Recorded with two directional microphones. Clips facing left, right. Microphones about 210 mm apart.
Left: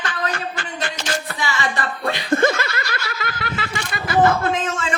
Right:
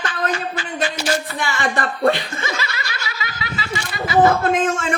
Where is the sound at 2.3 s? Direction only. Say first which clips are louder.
Left 9 dB; 55° left (ahead or behind).